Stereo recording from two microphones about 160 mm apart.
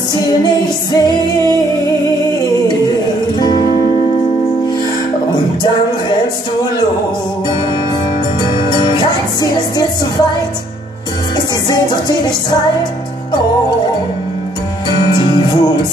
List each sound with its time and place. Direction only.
0.9 s music: 25° left (ahead or behind)
3.3 s music: 25° left (ahead or behind)
8.6 s music: 25° left (ahead or behind)
15.0 s music: 30° left (ahead or behind)